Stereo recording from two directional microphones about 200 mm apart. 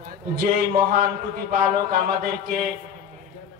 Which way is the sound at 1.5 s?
45° right (ahead or behind).